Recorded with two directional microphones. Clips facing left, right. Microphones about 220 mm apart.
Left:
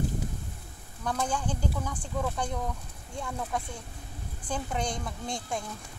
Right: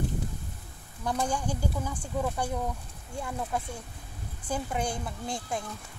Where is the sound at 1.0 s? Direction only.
10° right (ahead or behind).